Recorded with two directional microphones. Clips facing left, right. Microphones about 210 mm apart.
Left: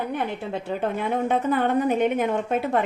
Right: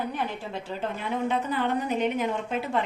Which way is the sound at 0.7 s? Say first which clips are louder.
Left 6 dB; 55° left (ahead or behind).